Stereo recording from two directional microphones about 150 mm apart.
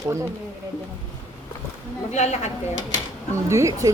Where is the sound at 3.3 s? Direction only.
20° right (ahead or behind).